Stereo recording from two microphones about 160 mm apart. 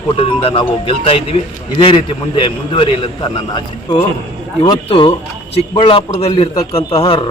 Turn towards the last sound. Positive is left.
turn(degrees=35)  # may be behind; listen again after turning